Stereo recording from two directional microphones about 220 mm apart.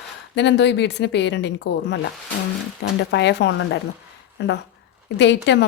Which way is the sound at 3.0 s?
50° left (ahead or behind).